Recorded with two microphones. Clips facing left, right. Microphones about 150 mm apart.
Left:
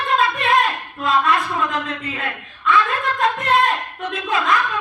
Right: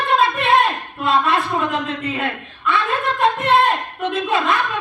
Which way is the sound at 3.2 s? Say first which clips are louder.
Right 3 dB; 25° right (ahead or behind).